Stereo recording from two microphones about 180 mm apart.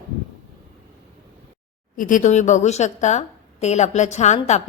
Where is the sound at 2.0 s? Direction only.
45° left (ahead or behind).